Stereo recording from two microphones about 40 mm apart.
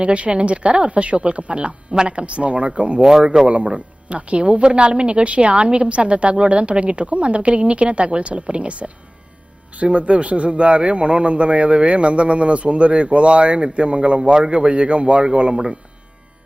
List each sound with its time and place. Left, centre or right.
0.0 s a man's voice: right
3.0 s speech: centre
3.4 s a man's voice: right